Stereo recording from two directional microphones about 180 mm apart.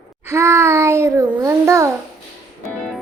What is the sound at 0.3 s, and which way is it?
A child's voice, 15° right (ahead or behind).